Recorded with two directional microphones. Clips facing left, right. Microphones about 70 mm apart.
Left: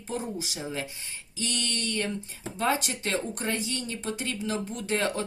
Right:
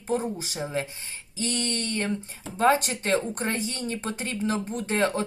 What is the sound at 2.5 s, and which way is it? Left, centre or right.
Speech, right.